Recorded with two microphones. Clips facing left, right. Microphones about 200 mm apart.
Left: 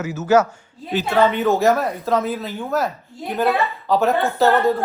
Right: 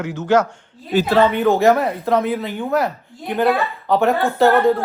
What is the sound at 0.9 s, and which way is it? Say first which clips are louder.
Speech: right 5 dB; 45° right (ahead or behind).